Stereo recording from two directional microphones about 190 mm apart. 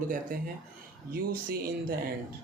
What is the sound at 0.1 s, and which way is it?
Speech, 45° right (ahead or behind).